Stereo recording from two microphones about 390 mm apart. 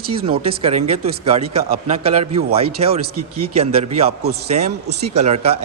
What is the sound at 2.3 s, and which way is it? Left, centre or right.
Speech, centre.